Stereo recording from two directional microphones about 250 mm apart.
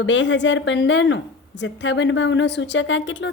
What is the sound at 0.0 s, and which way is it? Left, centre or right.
A woman's voice, left.